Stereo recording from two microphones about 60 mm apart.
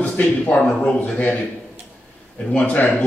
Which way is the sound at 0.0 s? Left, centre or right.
Left.